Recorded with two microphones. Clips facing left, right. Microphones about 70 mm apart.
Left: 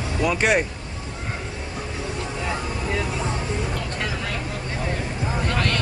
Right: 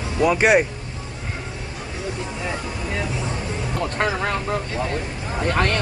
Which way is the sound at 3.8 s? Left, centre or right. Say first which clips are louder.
Right 6 dB; right.